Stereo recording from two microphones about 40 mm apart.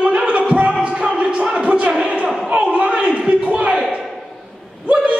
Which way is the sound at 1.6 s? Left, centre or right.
Right.